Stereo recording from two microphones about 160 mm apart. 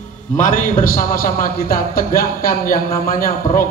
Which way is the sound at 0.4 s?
55° left (ahead or behind).